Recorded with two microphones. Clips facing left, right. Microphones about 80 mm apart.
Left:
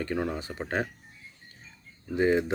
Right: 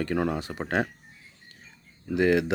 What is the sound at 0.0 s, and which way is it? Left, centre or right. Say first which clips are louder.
Speech: right 3 dB; right.